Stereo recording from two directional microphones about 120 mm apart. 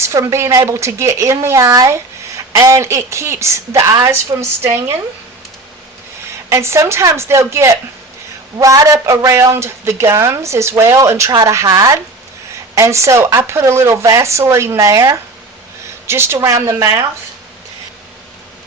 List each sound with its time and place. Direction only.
0.0 s a woman's voice: 25° right (ahead or behind)
6.5 s a woman's voice: 25° right (ahead or behind)